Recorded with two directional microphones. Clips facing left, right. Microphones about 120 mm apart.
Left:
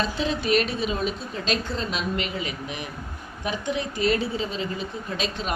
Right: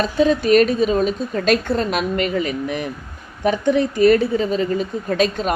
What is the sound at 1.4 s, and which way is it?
A woman's voice, 60° right (ahead or behind).